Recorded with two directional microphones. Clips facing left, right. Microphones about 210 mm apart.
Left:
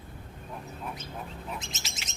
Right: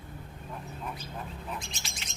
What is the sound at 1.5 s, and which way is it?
Bird, 20° left (ahead or behind).